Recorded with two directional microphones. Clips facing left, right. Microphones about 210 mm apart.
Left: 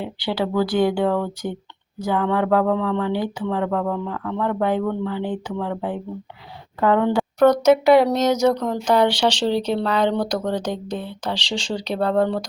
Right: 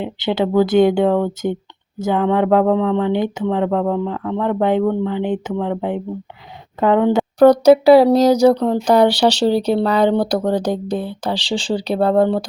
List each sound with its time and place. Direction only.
0.0 s speech: 20° right (ahead or behind)
7.3 s speech: 35° right (ahead or behind)
9.6 s speech: 10° right (ahead or behind)
9.8 s speech: 35° right (ahead or behind)